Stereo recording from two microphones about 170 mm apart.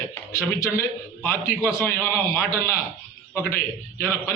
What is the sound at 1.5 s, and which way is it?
Speech, 15° left (ahead or behind).